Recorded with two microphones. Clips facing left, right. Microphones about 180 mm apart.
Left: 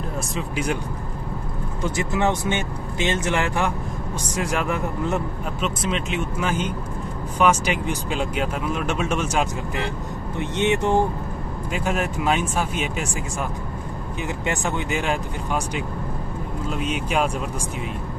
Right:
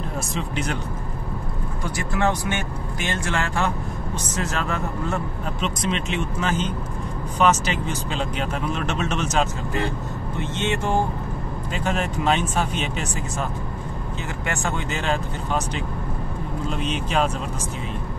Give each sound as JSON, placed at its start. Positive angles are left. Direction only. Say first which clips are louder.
{"t": 0.4, "sound": "speech", "louder": "left 3 dB", "side_deg": 10}
{"t": 1.8, "sound": "speech", "louder": "left 2 dB", "side_deg": 20}
{"t": 5.6, "sound": "speech", "louder": "left 1 dB", "side_deg": 5}